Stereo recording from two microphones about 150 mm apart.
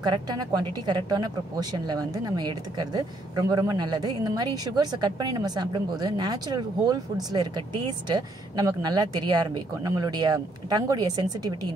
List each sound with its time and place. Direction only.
0.0 s speech: 30° right (ahead or behind)